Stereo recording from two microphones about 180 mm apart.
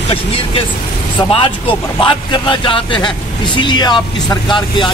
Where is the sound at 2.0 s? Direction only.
25° left (ahead or behind).